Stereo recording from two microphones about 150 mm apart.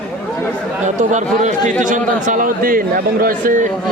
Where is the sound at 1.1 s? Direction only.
55° right (ahead or behind).